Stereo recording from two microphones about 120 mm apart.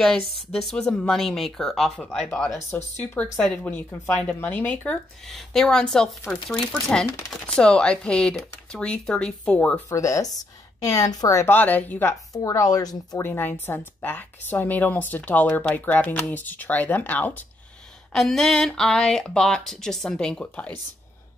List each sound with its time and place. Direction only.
0.4 s speech: 5° left (ahead or behind)
2.7 s speech: 15° left (ahead or behind)
5.2 s speech: centre (ahead or behind)
9.8 s a woman's voice: 25° left (ahead or behind)
13.2 s speech: 20° left (ahead or behind)
18.1 s speech: centre (ahead or behind)